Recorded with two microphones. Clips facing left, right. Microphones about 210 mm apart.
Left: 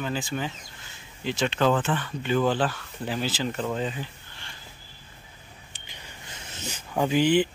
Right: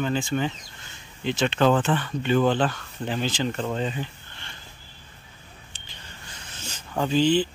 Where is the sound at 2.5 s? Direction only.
5° left (ahead or behind).